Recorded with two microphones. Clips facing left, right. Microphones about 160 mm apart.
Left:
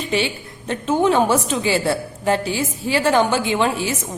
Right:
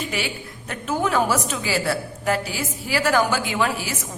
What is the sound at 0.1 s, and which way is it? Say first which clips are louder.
A woman's voice: left 7 dB; 25° left (ahead or behind).